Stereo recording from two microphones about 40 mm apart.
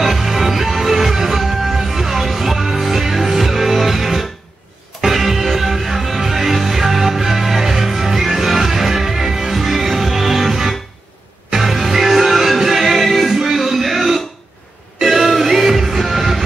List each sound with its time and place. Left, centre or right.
0.0 s music: centre